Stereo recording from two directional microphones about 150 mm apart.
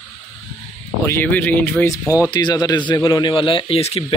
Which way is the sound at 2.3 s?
30° left (ahead or behind).